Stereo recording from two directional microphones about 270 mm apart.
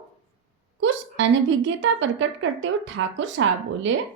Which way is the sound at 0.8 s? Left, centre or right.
Right.